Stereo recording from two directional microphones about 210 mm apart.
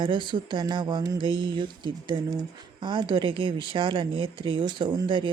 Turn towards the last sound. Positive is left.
turn(degrees=-25)  # may be behind; listen again after turning